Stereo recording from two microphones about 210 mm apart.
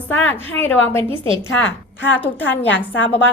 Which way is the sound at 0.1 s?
10° left (ahead or behind).